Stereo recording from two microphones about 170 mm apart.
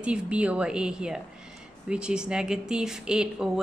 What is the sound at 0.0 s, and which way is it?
Speech, 5° right (ahead or behind).